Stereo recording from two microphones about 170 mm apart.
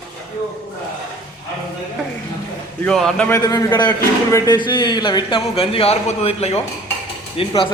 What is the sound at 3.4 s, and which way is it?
A man's voice, 20° left (ahead or behind).